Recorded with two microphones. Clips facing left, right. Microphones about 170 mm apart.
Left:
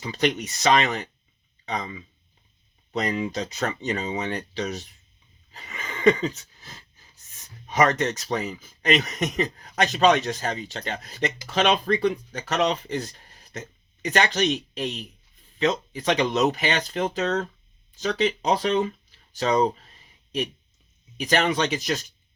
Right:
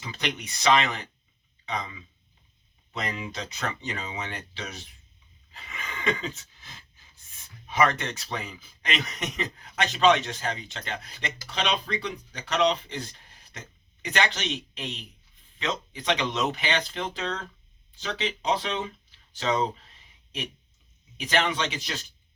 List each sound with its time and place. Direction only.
0.0 s speech: 40° left (ahead or behind)
5.5 s a sound: 40° left (ahead or behind)
11.4 s speech: 50° left (ahead or behind)